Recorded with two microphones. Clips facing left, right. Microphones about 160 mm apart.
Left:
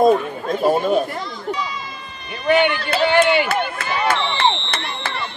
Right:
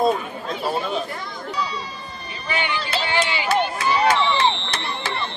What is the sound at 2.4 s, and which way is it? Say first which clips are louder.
Speech: left 10 dB; 55° left (ahead or behind).